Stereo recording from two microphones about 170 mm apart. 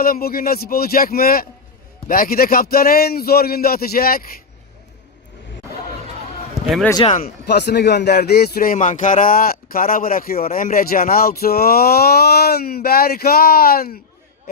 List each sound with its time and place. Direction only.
0.0 s speech: 60° left (ahead or behind)
7.1 s speech: 40° left (ahead or behind)
7.4 s speech: 75° left (ahead or behind)